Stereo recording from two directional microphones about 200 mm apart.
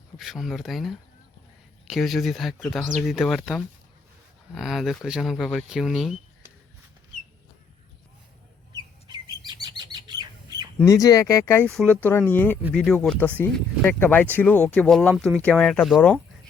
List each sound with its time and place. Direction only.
0.2 s speech: centre (ahead or behind)
8.7 s bird: 20° right (ahead or behind)
10.8 s speech: 15° left (ahead or behind)